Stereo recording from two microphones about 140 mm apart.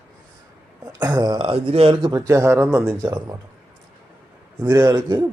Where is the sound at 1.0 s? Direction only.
30° right (ahead or behind).